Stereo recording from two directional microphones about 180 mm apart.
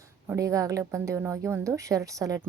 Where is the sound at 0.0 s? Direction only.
15° right (ahead or behind).